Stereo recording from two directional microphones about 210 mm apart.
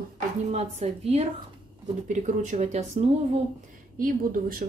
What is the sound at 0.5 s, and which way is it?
Speech, 30° right (ahead or behind).